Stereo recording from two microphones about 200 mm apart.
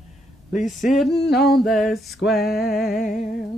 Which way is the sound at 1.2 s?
55° left (ahead or behind).